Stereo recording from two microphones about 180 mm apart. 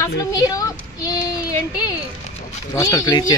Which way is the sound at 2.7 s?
20° left (ahead or behind).